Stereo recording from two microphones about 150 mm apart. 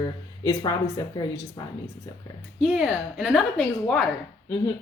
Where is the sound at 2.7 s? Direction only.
5° right (ahead or behind).